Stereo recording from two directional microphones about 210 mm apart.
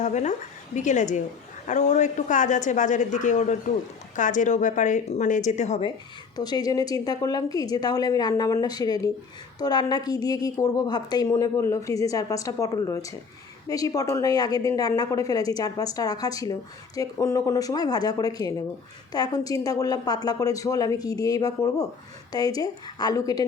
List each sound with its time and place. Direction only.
0.0 s speech: 35° left (ahead or behind)
6.3 s a woman's voice: 20° left (ahead or behind)